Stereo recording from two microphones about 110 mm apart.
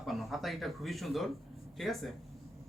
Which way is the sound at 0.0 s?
Centre (ahead or behind).